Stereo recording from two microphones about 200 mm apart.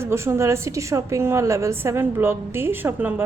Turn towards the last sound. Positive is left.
turn(degrees=-10)  # may be behind; listen again after turning